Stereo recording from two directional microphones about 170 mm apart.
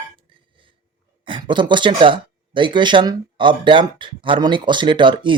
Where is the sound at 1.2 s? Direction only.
30° right (ahead or behind).